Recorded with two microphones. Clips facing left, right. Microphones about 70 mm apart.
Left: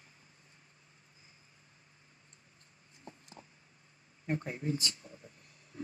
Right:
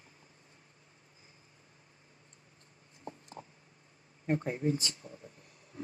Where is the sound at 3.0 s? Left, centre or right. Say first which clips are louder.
Right 6 dB; right.